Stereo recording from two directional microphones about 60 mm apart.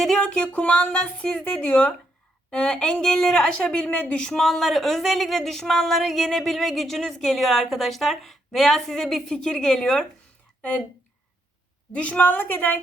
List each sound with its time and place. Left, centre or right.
0.2 s a woman's voice: left
10.6 s speech: left
11.9 s speech: left